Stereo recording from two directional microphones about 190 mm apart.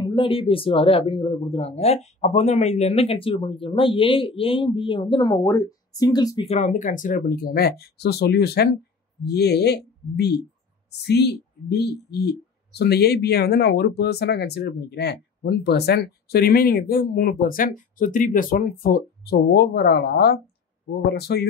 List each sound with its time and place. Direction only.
0.0 s speech: 25° left (ahead or behind); by 21.5 s 60° left (ahead or behind)